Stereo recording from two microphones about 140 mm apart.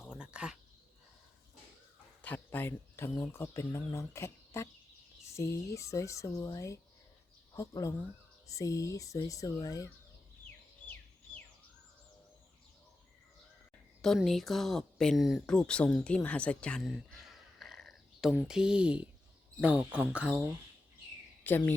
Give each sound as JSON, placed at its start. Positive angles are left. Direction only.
{"t": 0.1, "sound": "a sound", "side_deg": -5}
{"t": 2.2, "sound": "speech", "side_deg": 10}
{"t": 14.0, "sound": "speech", "side_deg": 0}
{"t": 21.5, "sound": "speech", "side_deg": 10}